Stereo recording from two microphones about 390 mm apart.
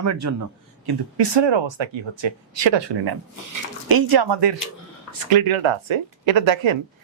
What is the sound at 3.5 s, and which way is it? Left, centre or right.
Speech, right.